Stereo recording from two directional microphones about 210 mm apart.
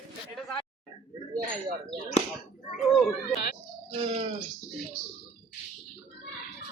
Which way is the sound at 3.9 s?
30° right (ahead or behind).